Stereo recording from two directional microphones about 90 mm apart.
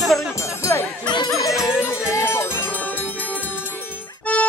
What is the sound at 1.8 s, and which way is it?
Music, 10° right (ahead or behind).